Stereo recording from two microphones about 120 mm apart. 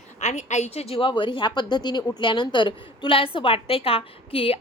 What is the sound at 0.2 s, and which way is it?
A woman's voice, 80° left.